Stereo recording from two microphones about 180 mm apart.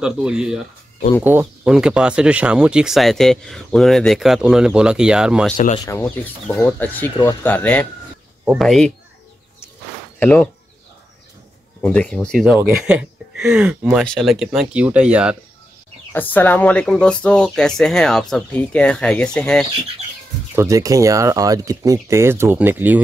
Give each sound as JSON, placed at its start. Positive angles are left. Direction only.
{"t": 0.0, "sound": "speech", "side_deg": -5}
{"t": 5.9, "sound": "speech", "side_deg": 15}
{"t": 10.1, "sound": "speech", "side_deg": 10}
{"t": 11.8, "sound": "speech", "side_deg": 5}
{"t": 16.1, "sound": "speech", "side_deg": 10}
{"t": 20.5, "sound": "speech", "side_deg": -15}